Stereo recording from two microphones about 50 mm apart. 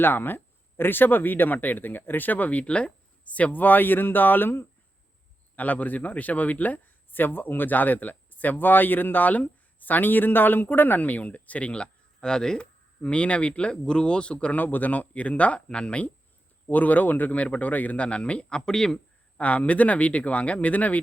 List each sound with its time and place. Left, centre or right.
0.0 s speech: left
5.5 s speech: left
14.5 s a man's voice: left; by 18.9 s centre
19.4 s a man's voice: left